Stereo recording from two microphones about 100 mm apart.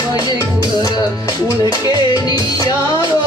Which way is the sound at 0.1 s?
40° left (ahead or behind).